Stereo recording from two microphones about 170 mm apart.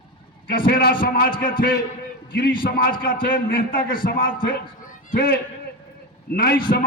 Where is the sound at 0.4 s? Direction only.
55° left (ahead or behind).